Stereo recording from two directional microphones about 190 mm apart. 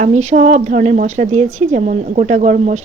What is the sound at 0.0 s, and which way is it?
Speech, 35° right (ahead or behind).